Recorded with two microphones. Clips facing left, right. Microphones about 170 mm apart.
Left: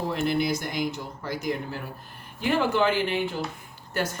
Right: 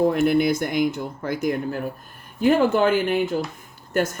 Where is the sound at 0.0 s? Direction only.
50° right (ahead or behind).